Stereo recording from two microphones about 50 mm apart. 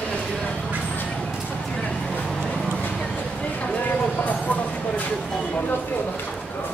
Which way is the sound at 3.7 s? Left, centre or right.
Left.